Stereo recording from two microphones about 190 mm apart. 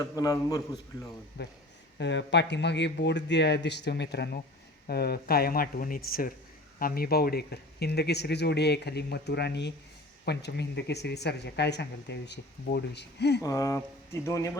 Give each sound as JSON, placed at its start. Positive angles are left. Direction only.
{"t": 0.0, "sound": "a man's voice", "side_deg": 20}
{"t": 1.4, "sound": "speech", "side_deg": 60}
{"t": 13.4, "sound": "speech", "side_deg": 15}